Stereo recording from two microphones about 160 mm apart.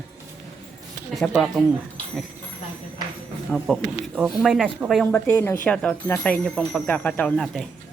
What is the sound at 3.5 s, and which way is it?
Speech, 5° left (ahead or behind).